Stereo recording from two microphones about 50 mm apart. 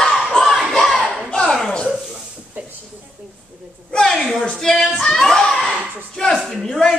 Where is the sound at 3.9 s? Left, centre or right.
Centre.